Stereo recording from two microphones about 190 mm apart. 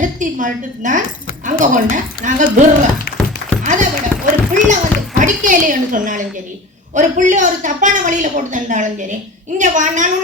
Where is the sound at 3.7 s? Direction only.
40° right (ahead or behind).